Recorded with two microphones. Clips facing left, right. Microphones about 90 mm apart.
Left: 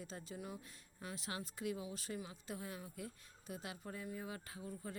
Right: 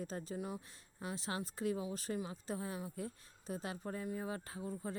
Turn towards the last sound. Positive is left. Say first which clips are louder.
# right 5 dB
turn(degrees=-30)  # may be behind; listen again after turning